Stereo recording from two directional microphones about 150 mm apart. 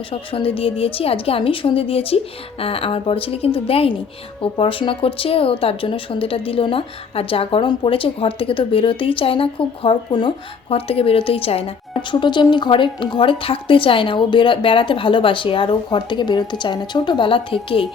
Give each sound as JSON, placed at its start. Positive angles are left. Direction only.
{"t": 0.1, "sound": "speech", "side_deg": 35}